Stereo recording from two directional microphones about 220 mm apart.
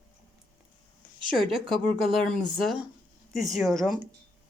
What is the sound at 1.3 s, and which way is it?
Speech, centre (ahead or behind).